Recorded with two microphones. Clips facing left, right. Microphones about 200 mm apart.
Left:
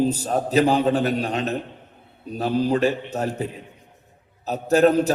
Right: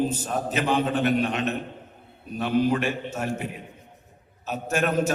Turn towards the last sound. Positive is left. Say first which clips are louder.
# left 7 dB
turn(degrees=35)  # may be behind; listen again after turning